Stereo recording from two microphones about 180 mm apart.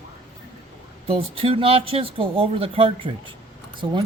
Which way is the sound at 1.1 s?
30° right (ahead or behind).